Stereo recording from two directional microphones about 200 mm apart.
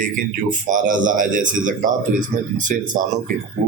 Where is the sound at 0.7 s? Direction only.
40° right (ahead or behind).